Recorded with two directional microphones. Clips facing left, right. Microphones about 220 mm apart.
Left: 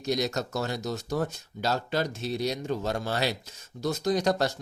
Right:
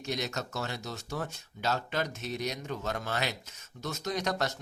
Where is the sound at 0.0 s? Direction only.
35° left (ahead or behind).